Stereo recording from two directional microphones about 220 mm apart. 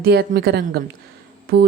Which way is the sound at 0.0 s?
45° right (ahead or behind).